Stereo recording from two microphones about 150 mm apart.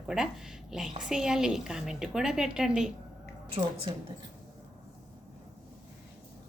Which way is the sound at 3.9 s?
30° right (ahead or behind).